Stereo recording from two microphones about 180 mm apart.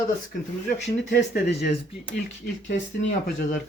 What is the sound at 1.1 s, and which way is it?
Speech, 65° left (ahead or behind).